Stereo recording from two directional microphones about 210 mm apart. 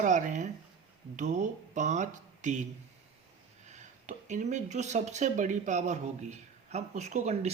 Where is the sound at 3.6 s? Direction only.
35° right (ahead or behind).